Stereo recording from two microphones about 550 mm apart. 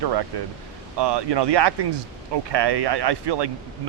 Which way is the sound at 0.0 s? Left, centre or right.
Right.